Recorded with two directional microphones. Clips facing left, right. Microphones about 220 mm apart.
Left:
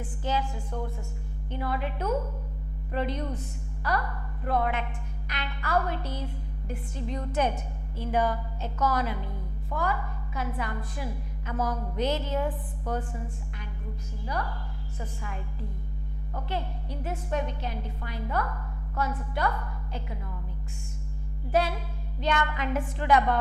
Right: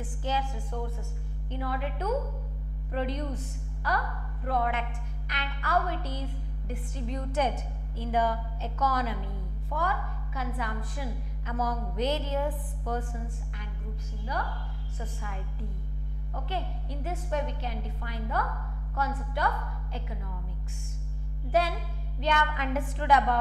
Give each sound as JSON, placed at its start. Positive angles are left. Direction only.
{"t": 0.2, "sound": "a woman's voice", "side_deg": 15}
{"t": 11.7, "sound": "music", "side_deg": 25}
{"t": 12.0, "sound": "a woman's voice", "side_deg": 10}
{"t": 14.2, "sound": "a woman's voice", "side_deg": 15}
{"t": 16.4, "sound": "a woman's voice", "side_deg": 15}
{"t": 21.5, "sound": "a woman's voice", "side_deg": 10}